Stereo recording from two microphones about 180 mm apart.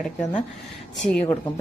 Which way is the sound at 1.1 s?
5° left (ahead or behind).